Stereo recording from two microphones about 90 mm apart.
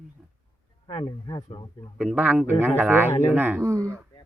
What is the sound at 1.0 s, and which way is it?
Speech, 45° left (ahead or behind).